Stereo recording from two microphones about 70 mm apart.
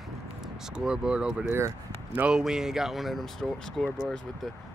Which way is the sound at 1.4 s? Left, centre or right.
Right.